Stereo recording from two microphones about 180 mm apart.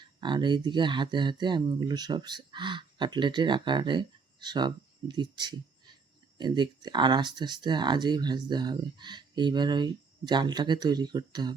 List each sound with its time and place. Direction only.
0.2 s speech: 25° right (ahead or behind)